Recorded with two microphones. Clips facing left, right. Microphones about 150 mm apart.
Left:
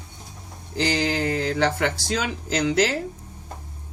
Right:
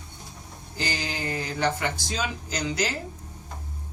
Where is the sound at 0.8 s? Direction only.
75° left (ahead or behind).